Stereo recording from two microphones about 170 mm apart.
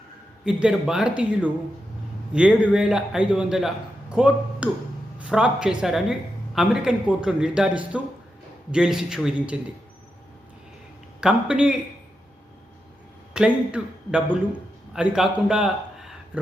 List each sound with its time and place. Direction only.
0.4 s speech: 5° right (ahead or behind)
11.2 s speech: 5° right (ahead or behind)
13.3 s a man's voice: 5° right (ahead or behind)